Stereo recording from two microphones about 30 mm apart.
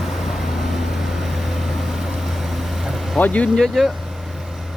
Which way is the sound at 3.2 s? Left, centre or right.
Left.